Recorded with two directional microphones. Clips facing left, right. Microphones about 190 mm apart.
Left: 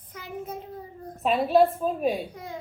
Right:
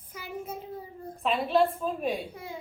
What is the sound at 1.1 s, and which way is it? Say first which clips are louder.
Speech: left 4 dB; centre (ahead or behind).